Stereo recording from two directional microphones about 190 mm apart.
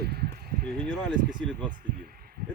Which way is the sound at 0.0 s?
55° right (ahead or behind).